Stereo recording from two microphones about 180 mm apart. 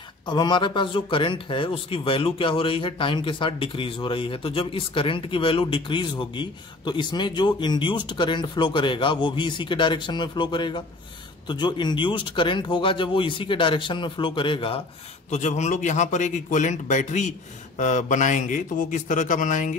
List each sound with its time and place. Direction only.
0.3 s speech: 25° left (ahead or behind)
15.3 s a man's voice: 40° left (ahead or behind)